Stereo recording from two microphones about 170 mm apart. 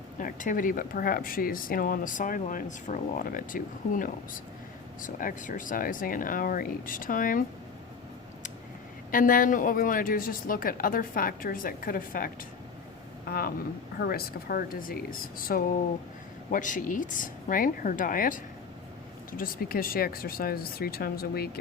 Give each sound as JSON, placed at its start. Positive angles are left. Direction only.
{"t": 0.2, "sound": "speech", "side_deg": 50}
{"t": 9.1, "sound": "speech", "side_deg": 55}
{"t": 14.0, "sound": "speech", "side_deg": 65}
{"t": 19.4, "sound": "speech", "side_deg": 60}